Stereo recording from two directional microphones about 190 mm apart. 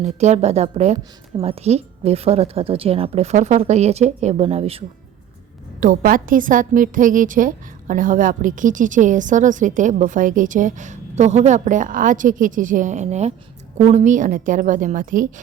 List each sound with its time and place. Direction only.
0.0 s a woman's voice: 35° right (ahead or behind)
5.8 s a woman's voice: 45° right (ahead or behind)